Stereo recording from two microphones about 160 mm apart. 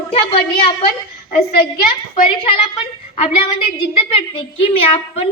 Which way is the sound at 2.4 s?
35° left (ahead or behind).